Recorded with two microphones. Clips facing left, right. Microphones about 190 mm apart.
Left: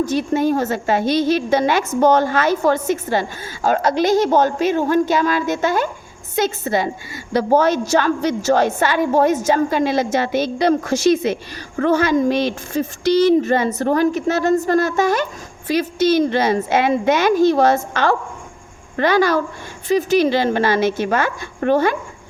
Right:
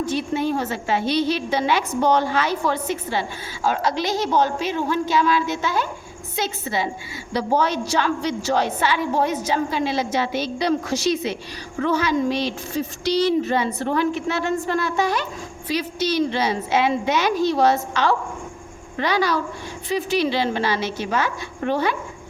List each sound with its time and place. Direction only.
0.0 s speech: 45° left (ahead or behind)